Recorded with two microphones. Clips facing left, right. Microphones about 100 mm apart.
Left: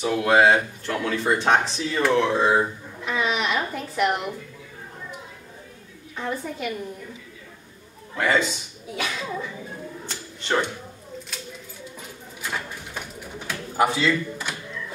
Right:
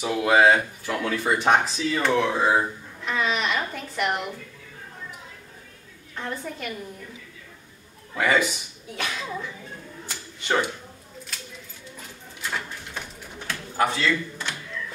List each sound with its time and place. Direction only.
0.0 s speech: 5° right (ahead or behind)
3.1 s a sound: 5° left (ahead or behind)
6.1 s speech: 5° left (ahead or behind)
8.1 s a man's voice: 5° right (ahead or behind)
10.0 s a sound: 5° right (ahead or behind)
12.4 s bird: 5° left (ahead or behind)